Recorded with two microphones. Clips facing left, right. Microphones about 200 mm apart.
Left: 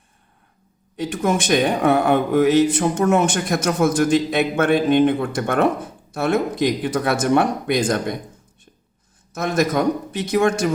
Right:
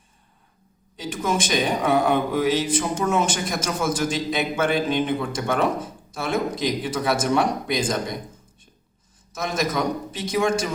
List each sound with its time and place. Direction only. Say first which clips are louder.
0.9 s speech: left 4 dB; 60° left (ahead or behind)
9.3 s speech: left 5 dB; 55° left (ahead or behind)